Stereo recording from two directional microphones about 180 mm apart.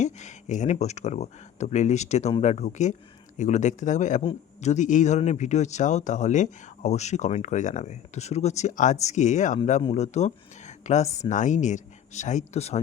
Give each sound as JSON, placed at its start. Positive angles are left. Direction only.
{"t": 0.0, "sound": "speech", "side_deg": 40}